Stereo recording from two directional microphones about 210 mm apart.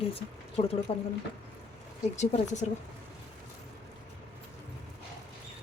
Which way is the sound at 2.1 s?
35° left (ahead or behind).